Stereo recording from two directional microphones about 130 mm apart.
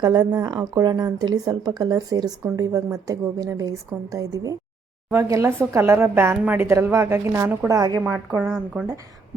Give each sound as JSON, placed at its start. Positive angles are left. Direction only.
{"t": 0.0, "sound": "speech", "side_deg": -30}
{"t": 8.0, "sound": "a woman's voice", "side_deg": -15}
{"t": 8.4, "sound": "speech", "side_deg": -5}